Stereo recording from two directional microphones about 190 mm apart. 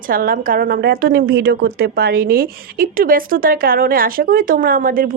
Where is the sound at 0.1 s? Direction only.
50° right (ahead or behind).